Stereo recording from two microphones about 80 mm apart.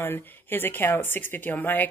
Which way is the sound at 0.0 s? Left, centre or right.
Left.